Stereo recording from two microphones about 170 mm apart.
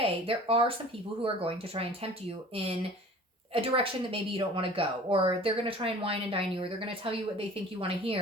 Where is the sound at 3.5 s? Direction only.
35° right (ahead or behind).